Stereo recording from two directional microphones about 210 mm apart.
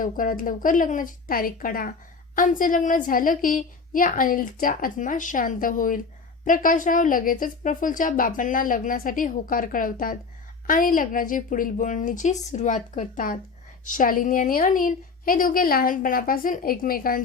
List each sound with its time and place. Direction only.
0.0 s a woman's voice: 40° left (ahead or behind)